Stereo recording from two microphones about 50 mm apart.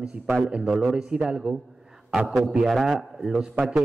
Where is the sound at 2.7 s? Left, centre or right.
Centre.